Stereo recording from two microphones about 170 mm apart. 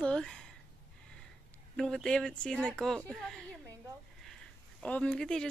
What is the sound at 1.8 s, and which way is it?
Speech, 5° left (ahead or behind).